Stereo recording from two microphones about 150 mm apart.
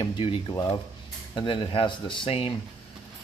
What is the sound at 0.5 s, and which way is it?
Speech, 20° left (ahead or behind).